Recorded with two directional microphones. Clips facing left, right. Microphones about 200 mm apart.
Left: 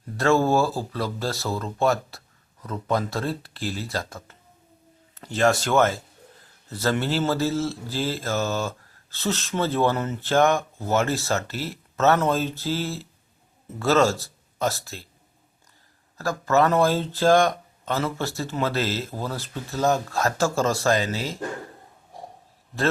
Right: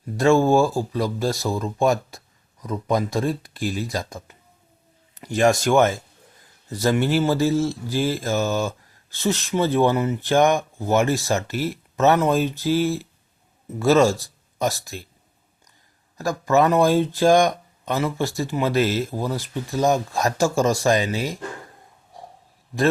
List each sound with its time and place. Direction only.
0.2 s speech: 15° right (ahead or behind)
16.1 s speech: 15° right (ahead or behind)